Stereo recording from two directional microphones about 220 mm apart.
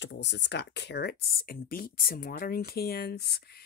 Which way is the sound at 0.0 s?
50° left (ahead or behind).